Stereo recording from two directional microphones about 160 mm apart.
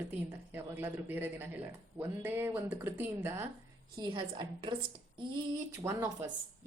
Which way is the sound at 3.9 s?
30° right (ahead or behind).